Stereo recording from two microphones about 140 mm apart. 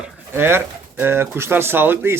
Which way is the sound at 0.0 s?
15° right (ahead or behind).